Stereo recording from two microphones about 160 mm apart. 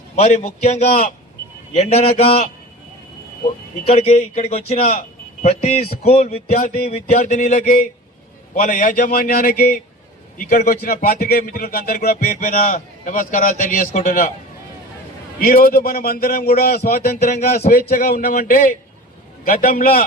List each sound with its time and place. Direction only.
0.2 s a man's voice: 45° left (ahead or behind)
3.8 s a man's voice: 40° left (ahead or behind)
15.4 s speech: 60° left (ahead or behind)
17.2 s speech: 45° left (ahead or behind)
17.7 s a man's voice: 65° left (ahead or behind)